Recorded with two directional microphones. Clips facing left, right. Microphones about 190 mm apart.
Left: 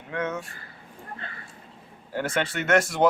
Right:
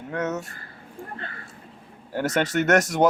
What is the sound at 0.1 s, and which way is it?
Speech, 40° right (ahead or behind).